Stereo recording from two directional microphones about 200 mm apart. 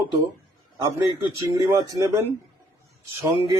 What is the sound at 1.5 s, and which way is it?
A man's voice, 15° right (ahead or behind).